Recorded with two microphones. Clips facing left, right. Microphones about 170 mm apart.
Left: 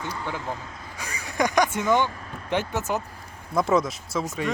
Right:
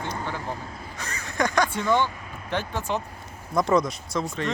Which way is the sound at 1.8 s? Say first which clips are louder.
Left 1 dB; 15° left (ahead or behind).